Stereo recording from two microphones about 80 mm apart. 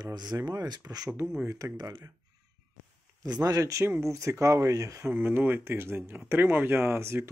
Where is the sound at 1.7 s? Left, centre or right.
Right.